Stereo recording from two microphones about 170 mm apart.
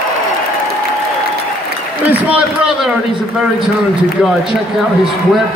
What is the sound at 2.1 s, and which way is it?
Speech, 10° right (ahead or behind).